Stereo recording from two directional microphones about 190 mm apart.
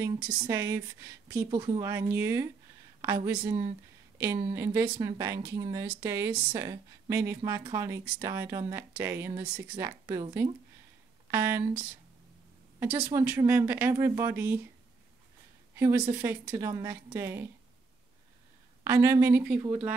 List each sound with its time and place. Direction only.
0.0 s speech: 15° right (ahead or behind)
12.8 s speech: 10° right (ahead or behind)
15.7 s speech: 10° right (ahead or behind)
18.9 s speech: 15° right (ahead or behind)